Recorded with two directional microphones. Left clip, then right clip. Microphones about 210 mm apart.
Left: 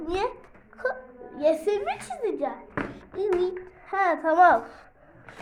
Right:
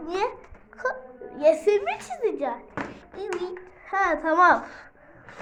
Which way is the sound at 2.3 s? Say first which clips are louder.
Right 1 dB; 15° right (ahead or behind).